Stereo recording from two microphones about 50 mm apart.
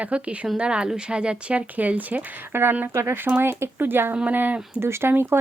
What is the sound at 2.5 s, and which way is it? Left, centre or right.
Speech, right.